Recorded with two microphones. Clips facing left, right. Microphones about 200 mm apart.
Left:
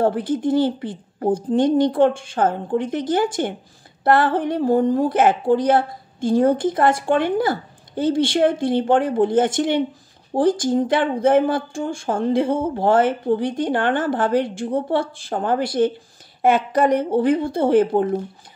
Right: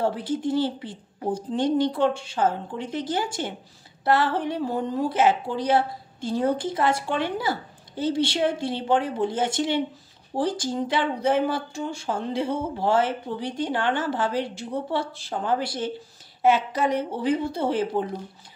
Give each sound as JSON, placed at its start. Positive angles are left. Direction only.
{"t": 0.0, "sound": "a woman's voice", "side_deg": 55}